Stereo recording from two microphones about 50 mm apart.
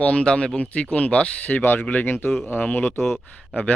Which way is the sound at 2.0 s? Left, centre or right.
Left.